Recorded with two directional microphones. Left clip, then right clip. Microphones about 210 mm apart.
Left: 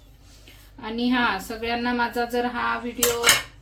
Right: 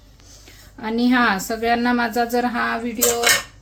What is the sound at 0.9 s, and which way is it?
Speech, 50° right (ahead or behind).